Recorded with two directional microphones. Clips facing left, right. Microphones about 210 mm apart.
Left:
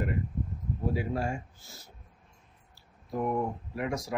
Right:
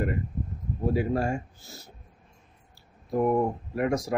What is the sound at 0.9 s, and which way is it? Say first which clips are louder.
Speech: right 8 dB; 50° right (ahead or behind).